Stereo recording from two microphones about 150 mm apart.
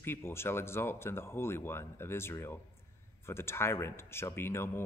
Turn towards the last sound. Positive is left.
turn(degrees=15)  # may be behind; listen again after turning